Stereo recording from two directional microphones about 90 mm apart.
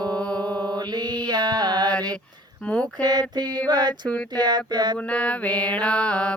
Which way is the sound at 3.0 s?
50° right (ahead or behind).